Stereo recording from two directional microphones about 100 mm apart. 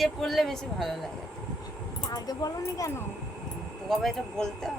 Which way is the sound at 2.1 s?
40° left (ahead or behind).